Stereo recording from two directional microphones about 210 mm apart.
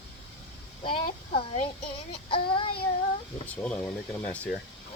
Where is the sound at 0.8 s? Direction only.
25° left (ahead or behind).